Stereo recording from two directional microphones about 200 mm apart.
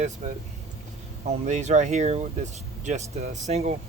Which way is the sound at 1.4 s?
35° right (ahead or behind).